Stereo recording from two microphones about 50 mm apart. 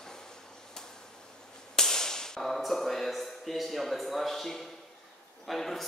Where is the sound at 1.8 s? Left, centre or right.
Centre.